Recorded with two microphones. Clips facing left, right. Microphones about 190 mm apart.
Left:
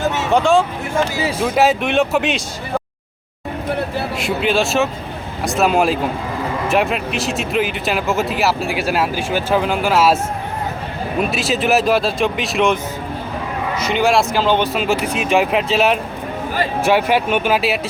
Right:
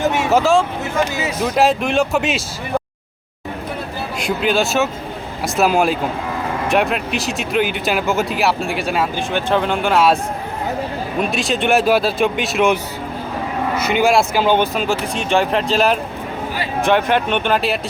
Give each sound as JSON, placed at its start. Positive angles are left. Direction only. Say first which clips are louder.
{"t": 0.0, "sound": "a sound", "louder": "right 1 dB", "side_deg": -15}
{"t": 1.4, "sound": "speech", "louder": "even", "side_deg": 5}
{"t": 4.2, "sound": "speech", "louder": "right 1 dB", "side_deg": 0}
{"t": 11.2, "sound": "speech", "louder": "left 1 dB", "side_deg": 5}
{"t": 13.7, "sound": "vehicle", "louder": "right 1 dB", "side_deg": -55}
{"t": 14.0, "sound": "speech", "louder": "even", "side_deg": 0}